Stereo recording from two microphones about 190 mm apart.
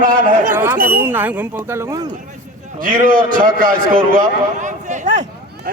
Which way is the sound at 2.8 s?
45° right (ahead or behind).